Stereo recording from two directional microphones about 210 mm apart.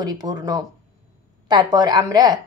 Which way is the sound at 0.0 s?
20° right (ahead or behind).